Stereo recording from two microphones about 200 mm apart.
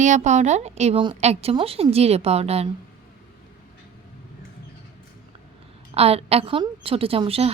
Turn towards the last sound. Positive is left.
turn(degrees=-30)  # may be behind; listen again after turning